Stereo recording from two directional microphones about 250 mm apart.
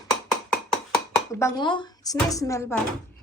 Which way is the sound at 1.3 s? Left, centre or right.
Centre.